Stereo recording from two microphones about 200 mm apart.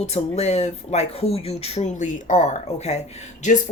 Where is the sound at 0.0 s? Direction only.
30° left (ahead or behind).